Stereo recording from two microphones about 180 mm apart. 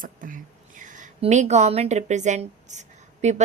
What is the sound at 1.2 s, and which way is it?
A woman's voice, 40° right (ahead or behind).